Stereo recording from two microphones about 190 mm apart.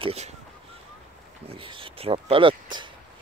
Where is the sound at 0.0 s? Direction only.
35° right (ahead or behind).